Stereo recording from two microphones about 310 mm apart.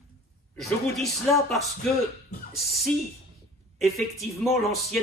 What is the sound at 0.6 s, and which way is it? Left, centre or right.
A man's voice, centre.